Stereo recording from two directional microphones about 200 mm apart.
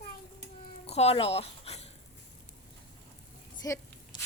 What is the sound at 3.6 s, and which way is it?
Speech, 15° left (ahead or behind).